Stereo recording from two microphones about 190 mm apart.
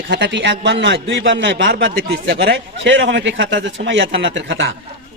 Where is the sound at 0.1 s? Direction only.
70° right (ahead or behind).